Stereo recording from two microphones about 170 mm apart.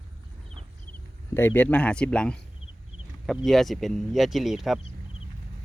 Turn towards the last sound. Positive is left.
turn(degrees=0)  # may be behind; listen again after turning